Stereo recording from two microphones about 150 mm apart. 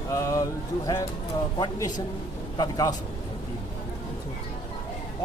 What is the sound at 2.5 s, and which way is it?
Speech, 25° left (ahead or behind).